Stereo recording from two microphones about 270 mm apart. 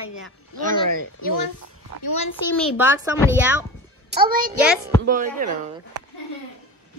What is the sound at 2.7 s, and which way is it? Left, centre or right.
Speech, centre.